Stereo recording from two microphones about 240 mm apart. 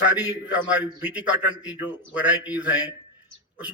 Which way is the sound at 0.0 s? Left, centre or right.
Centre.